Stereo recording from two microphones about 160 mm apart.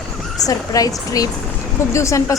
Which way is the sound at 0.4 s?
20° left (ahead or behind).